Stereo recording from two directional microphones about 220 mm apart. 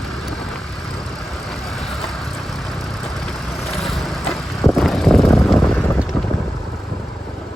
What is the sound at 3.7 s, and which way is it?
Vehicle, centre (ahead or behind).